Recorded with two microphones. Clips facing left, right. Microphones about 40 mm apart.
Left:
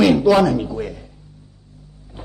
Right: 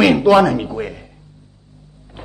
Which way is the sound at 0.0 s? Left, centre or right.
Right.